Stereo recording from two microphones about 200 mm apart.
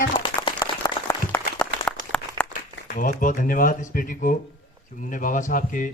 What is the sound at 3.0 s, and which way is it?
A woman's voice, 40° left (ahead or behind).